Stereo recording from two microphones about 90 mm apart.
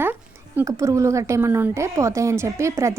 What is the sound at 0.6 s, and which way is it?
A woman's voice, 35° right (ahead or behind).